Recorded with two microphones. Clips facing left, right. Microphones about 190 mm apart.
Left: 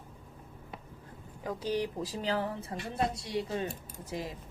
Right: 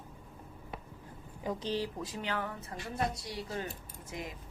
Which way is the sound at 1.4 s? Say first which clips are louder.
Right 1 dB; centre (ahead or behind).